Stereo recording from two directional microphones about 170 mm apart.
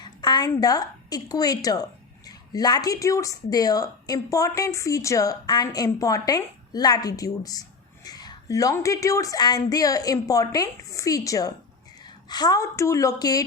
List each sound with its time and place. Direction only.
0.0 s a woman's voice: 25° left (ahead or behind)